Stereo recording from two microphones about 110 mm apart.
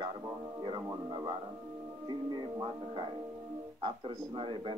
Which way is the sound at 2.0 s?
40° right (ahead or behind).